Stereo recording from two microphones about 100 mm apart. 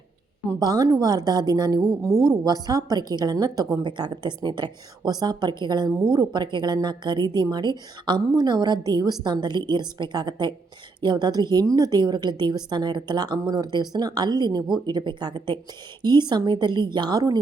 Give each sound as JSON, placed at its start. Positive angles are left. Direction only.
{"t": 0.6, "sound": "a woman's voice", "side_deg": -40}